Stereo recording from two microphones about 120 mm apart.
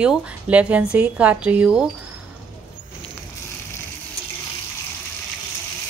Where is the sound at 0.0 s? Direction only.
10° right (ahead or behind).